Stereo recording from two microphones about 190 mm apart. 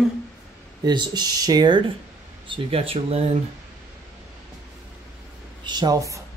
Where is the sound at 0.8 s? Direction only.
25° right (ahead or behind).